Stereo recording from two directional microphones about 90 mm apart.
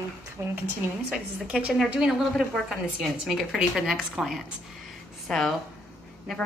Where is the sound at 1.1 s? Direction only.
10° right (ahead or behind).